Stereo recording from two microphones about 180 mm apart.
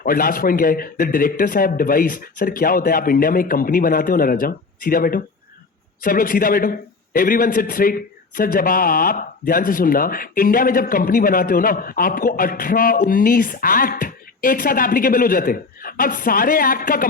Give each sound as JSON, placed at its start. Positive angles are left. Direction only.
{"t": 0.0, "sound": "speech", "side_deg": 50}